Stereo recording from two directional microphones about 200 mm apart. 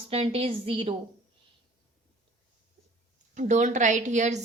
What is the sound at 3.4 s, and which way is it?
A woman's voice, 35° right (ahead or behind).